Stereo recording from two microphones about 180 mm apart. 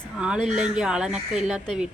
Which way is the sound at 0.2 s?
5° right (ahead or behind).